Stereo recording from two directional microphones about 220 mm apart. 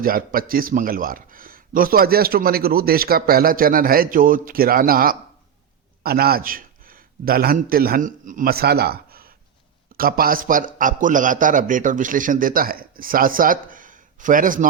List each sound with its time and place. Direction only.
0.0 s a man's voice: 40° right (ahead or behind)